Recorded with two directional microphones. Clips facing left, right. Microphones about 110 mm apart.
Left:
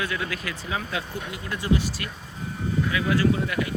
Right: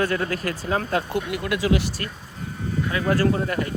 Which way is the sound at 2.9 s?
40° right (ahead or behind).